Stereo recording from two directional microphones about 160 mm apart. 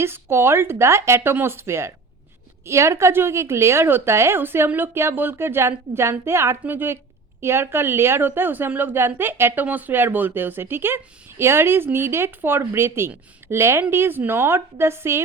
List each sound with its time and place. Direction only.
0.0 s a woman's voice: 15° right (ahead or behind)